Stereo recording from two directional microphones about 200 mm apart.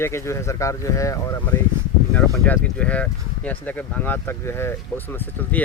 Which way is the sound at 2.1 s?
5° left (ahead or behind).